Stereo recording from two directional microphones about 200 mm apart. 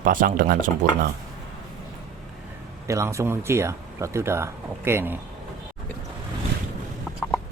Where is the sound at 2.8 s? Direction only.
15° right (ahead or behind).